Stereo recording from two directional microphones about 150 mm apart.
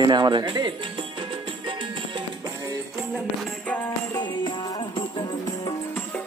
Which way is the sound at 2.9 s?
Centre (ahead or behind).